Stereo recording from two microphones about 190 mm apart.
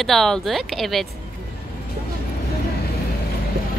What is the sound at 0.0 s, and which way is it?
Speech, centre (ahead or behind).